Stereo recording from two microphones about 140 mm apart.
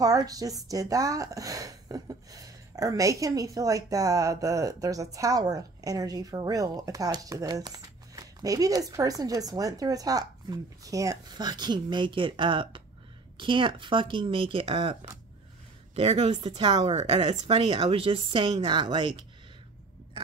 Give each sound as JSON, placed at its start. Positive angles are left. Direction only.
{"t": 0.0, "sound": "a woman's voice", "side_deg": -25}